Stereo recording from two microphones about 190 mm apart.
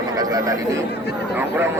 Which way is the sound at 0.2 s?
20° right (ahead or behind).